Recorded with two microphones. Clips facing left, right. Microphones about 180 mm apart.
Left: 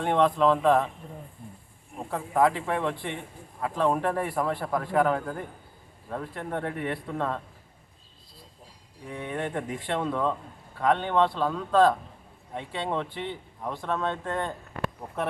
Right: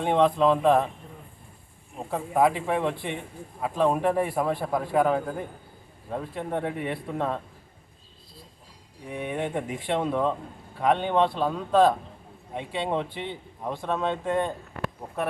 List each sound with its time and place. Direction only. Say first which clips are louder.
0.0 s a man's voice: right 1 dB; 15° right (ahead or behind)
2.0 s a man's voice: right 1 dB; 10° right (ahead or behind)
9.0 s a man's voice: right 2 dB; 15° right (ahead or behind)